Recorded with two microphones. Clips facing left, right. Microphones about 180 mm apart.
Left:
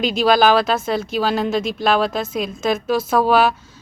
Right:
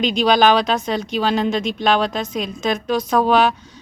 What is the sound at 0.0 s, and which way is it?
Speech, 5° left (ahead or behind).